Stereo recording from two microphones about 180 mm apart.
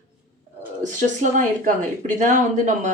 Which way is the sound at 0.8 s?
45° right (ahead or behind).